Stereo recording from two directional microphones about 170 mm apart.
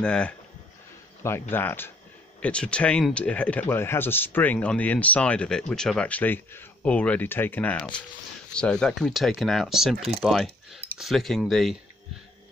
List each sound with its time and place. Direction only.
0.0 s speech: 5° left (ahead or behind)
1.5 s speech: 10° left (ahead or behind)